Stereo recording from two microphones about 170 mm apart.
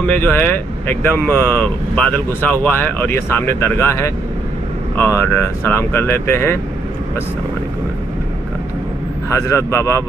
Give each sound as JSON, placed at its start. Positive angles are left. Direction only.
{"t": 0.0, "sound": "speech", "side_deg": 10}
{"t": 9.3, "sound": "speech", "side_deg": 15}